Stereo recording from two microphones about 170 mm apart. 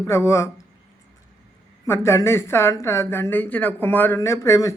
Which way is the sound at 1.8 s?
15° left (ahead or behind).